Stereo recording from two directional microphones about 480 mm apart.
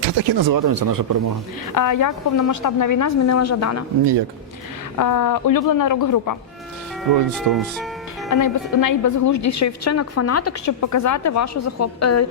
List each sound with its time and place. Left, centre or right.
0.2 s speech: right
1.7 s speech: left
4.9 s speech: left
7.3 s speech: centre
8.3 s speech: left